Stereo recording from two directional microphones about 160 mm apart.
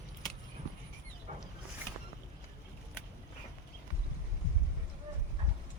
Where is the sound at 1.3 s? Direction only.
45° right (ahead or behind).